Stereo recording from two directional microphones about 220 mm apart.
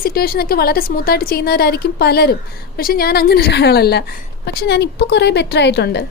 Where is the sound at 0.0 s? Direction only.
45° left (ahead or behind).